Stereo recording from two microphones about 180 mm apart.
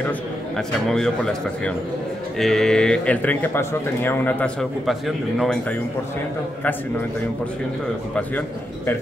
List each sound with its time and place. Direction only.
0.6 s speech: centre (ahead or behind)
8.2 s speech: 10° left (ahead or behind)